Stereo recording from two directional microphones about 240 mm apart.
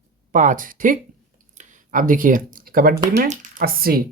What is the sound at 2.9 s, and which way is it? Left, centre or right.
Speech, centre.